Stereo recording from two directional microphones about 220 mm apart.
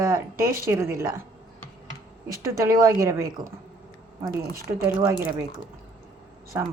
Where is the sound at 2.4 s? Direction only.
15° right (ahead or behind).